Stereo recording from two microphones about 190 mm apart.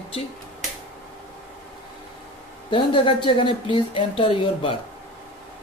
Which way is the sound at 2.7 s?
25° left (ahead or behind).